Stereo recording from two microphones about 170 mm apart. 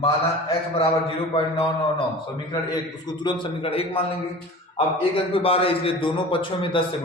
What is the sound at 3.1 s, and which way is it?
A man's voice, 30° left (ahead or behind).